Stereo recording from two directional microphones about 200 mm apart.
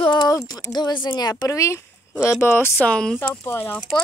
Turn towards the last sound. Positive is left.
turn(degrees=10)  # may be behind; listen again after turning